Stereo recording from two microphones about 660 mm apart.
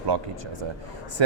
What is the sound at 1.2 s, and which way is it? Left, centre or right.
Speech, right.